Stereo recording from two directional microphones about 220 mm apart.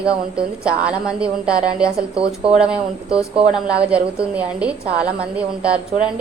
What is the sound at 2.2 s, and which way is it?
Speech, 25° right (ahead or behind).